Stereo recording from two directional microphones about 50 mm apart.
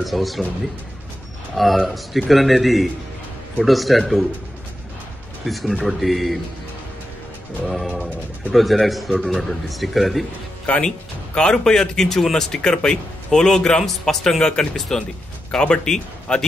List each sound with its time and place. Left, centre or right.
0.0 s a man's voice: centre
1.5 s a man's voice: centre
5.4 s a man's voice: centre
7.6 s a man's voice: centre
10.7 s speech: left
11.3 s speech: centre